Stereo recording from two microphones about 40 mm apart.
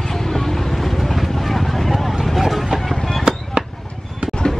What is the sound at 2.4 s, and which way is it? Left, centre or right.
Vehicle, centre.